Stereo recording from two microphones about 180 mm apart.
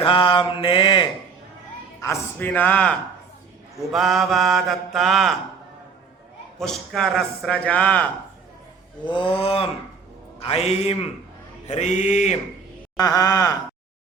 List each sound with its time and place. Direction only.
0.0 s mantra: 30° left (ahead or behind)
2.0 s a man's voice: 10° left (ahead or behind)
6.6 s a man's voice: centre (ahead or behind)
9.0 s a man's voice: 30° left (ahead or behind)
13.0 s mantra: 20° left (ahead or behind)